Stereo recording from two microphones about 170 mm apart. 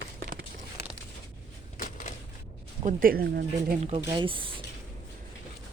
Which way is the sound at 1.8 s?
50° left (ahead or behind).